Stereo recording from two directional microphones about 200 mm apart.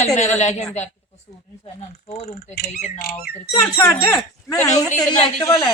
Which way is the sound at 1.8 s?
35° left (ahead or behind).